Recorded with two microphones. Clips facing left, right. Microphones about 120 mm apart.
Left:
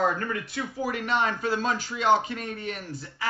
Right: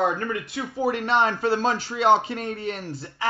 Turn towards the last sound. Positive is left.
turn(degrees=-30)  # may be behind; listen again after turning